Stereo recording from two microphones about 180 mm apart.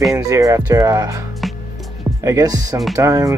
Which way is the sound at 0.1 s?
20° right (ahead or behind).